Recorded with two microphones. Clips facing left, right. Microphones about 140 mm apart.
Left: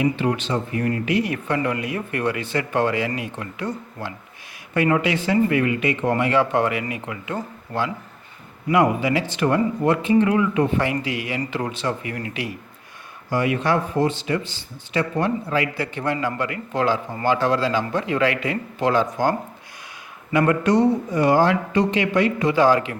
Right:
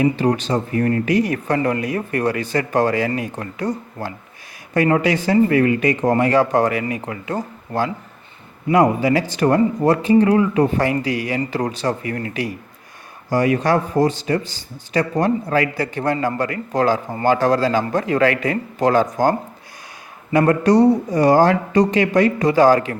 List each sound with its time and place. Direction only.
0.0 s speech: 40° right (ahead or behind)
13.3 s a man's voice: 40° right (ahead or behind)